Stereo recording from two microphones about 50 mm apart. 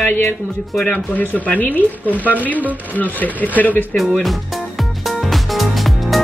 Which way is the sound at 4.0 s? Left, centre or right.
Centre.